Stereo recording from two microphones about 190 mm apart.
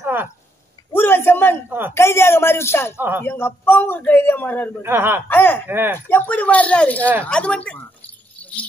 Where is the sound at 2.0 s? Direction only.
15° left (ahead or behind).